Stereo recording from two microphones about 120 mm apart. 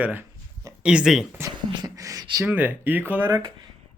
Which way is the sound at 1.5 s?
35° right (ahead or behind).